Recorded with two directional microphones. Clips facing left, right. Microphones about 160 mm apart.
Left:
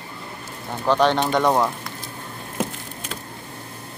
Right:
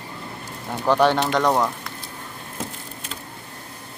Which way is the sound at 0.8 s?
10° right (ahead or behind).